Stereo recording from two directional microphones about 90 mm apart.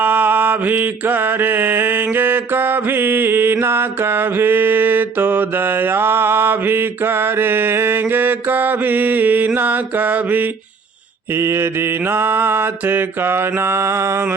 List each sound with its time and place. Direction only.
0.0 s mantra: 20° right (ahead or behind)
11.3 s mantra: 30° right (ahead or behind)